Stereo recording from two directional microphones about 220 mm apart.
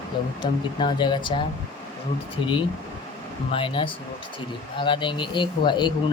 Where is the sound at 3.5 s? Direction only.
25° left (ahead or behind).